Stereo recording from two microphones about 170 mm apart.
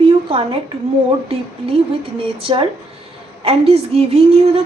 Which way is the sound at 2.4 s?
30° right (ahead or behind).